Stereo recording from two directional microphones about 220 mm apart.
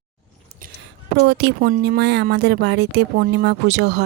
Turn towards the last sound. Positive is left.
turn(degrees=-50)  # may be behind; listen again after turning